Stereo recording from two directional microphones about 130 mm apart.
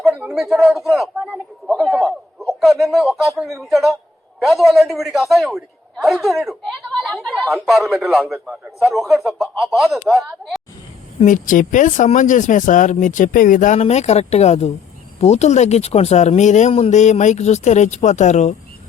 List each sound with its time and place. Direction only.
0.0 s a sound: centre (ahead or behind)
2.5 s a man's voice: centre (ahead or behind)
7.0 s a sound: 5° right (ahead or behind)
8.3 s a man's voice: 5° right (ahead or behind)
11.3 s speech: 85° left
13.8 s speech: 60° left (ahead or behind)